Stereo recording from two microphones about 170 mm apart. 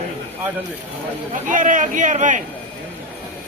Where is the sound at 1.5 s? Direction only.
50° right (ahead or behind).